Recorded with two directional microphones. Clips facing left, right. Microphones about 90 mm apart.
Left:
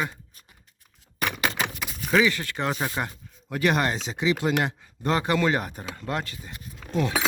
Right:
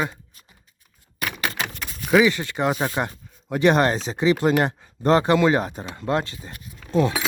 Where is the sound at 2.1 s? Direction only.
20° right (ahead or behind).